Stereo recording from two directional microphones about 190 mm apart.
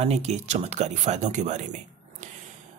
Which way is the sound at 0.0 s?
35° right (ahead or behind).